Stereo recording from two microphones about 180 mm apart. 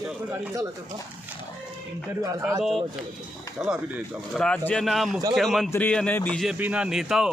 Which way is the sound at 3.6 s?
5° right (ahead or behind).